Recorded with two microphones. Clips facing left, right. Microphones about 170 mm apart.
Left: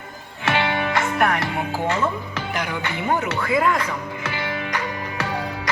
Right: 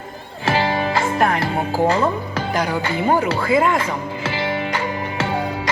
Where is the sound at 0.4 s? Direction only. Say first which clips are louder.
Right 3 dB; 35° right (ahead or behind).